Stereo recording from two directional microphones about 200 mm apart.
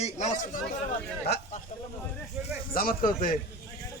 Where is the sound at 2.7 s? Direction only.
45° left (ahead or behind).